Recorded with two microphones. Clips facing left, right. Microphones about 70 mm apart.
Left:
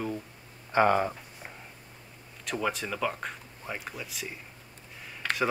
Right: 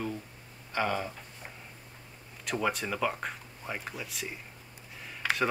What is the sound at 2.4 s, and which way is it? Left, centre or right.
Speech, centre.